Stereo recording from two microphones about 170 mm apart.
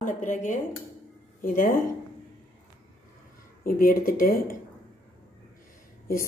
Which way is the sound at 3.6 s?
55° left (ahead or behind).